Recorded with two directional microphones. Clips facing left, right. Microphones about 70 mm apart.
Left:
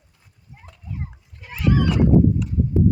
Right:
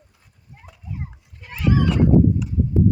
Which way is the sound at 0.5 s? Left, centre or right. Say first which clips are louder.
Even; centre.